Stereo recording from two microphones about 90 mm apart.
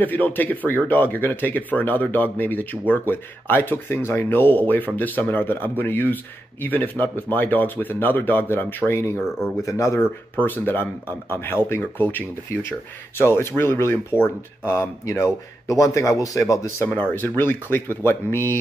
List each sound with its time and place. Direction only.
0.0 s speech: 20° left (ahead or behind); by 10.0 s 35° left (ahead or behind)
10.3 s speech: 20° left (ahead or behind)